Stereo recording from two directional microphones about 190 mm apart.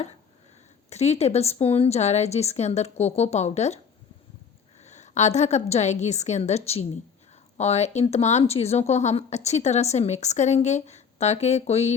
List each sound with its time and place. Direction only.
0.9 s speech: 35° left (ahead or behind)
4.8 s a woman's voice: 35° left (ahead or behind)